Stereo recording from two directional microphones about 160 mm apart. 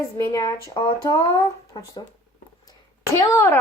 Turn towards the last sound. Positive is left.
turn(degrees=15)  # may be behind; listen again after turning